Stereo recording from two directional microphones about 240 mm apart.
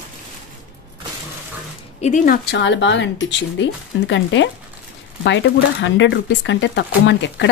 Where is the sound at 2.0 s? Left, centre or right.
Left.